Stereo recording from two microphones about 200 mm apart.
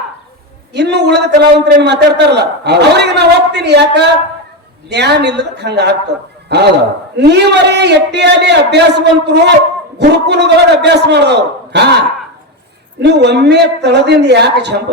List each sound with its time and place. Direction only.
0.7 s a man's voice: 55° right (ahead or behind)
13.0 s a man's voice: 60° right (ahead or behind)